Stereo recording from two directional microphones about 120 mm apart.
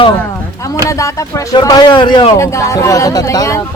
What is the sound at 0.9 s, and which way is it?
A man's voice, 25° left (ahead or behind).